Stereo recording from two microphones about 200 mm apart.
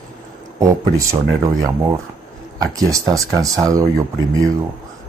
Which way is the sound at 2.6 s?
15° right (ahead or behind).